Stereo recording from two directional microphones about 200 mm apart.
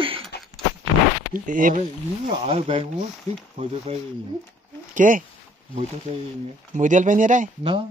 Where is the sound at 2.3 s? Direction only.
30° right (ahead or behind).